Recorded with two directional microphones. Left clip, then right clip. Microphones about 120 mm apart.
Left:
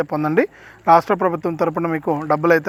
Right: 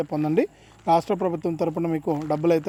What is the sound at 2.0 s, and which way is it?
Speech, 30° left (ahead or behind).